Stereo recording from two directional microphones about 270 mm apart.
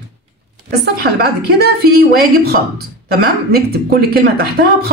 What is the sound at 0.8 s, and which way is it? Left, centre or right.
A woman's voice, right.